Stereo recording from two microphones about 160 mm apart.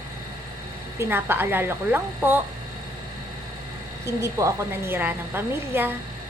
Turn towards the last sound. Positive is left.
turn(degrees=-15)  # may be behind; listen again after turning